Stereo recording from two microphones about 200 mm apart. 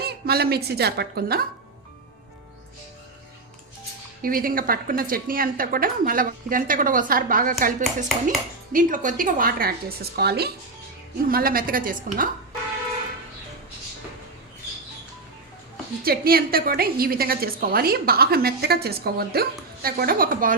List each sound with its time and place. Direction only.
0.0 s a woman's voice: 50° right (ahead or behind)
4.2 s a woman's voice: 45° right (ahead or behind)
16.0 s a woman's voice: 50° right (ahead or behind)